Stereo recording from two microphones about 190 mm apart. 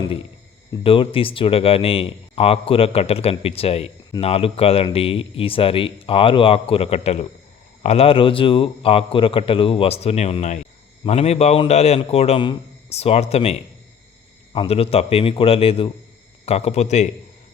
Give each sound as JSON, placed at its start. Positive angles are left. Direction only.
{"t": 0.8, "sound": "speech", "side_deg": 30}